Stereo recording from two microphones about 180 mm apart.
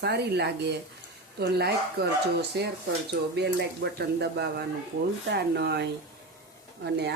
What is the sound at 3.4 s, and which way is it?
Speech, 70° right (ahead or behind).